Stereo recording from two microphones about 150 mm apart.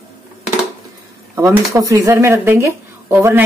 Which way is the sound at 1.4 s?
20° right (ahead or behind).